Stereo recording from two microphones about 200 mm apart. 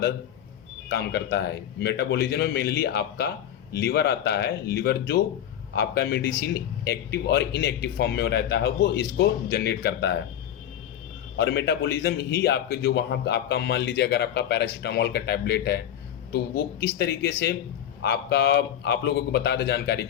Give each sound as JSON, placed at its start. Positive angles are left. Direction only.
{"t": 0.9, "sound": "a man's voice", "side_deg": 55}
{"t": 11.3, "sound": "a man's voice", "side_deg": 55}
{"t": 17.0, "sound": "a man's voice", "side_deg": 55}